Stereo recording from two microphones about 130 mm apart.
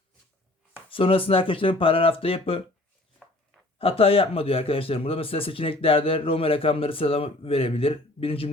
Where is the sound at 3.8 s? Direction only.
45° left (ahead or behind).